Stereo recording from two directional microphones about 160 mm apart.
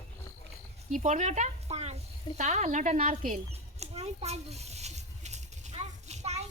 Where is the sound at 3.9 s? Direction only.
40° right (ahead or behind).